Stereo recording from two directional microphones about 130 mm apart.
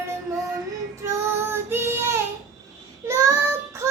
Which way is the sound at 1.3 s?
15° right (ahead or behind).